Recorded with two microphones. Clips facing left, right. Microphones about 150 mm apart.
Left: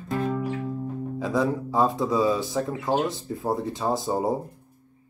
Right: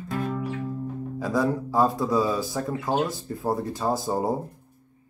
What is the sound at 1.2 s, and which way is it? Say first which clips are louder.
A man's voice: even; centre (ahead or behind).